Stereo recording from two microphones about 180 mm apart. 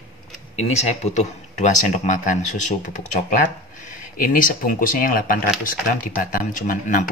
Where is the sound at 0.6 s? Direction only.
40° left (ahead or behind).